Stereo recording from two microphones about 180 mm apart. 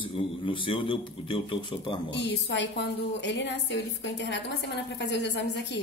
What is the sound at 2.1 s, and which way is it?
A woman's voice, 75° left (ahead or behind).